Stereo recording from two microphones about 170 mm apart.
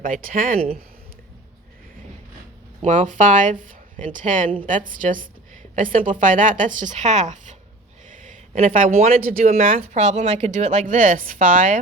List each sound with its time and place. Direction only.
0.0 s speech: 55° right (ahead or behind)
2.8 s a woman's voice: 50° right (ahead or behind)
9.7 s a woman's voice: 45° right (ahead or behind)